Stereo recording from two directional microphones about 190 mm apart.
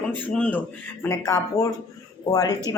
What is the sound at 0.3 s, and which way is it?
Speech, 5° left (ahead or behind).